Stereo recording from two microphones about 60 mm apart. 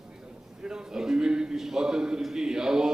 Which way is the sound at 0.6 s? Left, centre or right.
Centre.